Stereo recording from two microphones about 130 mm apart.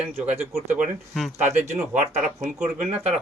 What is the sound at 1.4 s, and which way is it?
Speech, 60° right (ahead or behind).